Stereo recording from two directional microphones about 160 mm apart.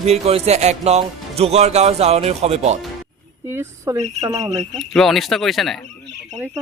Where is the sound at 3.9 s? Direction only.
20° right (ahead or behind).